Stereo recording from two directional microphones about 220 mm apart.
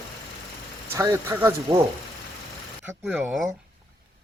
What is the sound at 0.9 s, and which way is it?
Speech, 10° right (ahead or behind).